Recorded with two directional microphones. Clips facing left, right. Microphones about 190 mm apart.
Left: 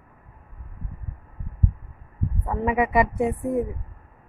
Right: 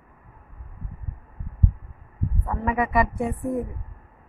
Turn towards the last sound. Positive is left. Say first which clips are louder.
# left 3 dB
turn(degrees=20)  # may be behind; listen again after turning